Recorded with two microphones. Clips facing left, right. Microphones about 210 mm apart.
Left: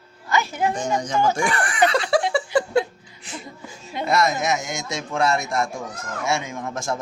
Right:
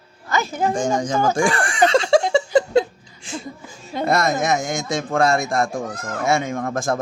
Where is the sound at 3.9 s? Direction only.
45° right (ahead or behind).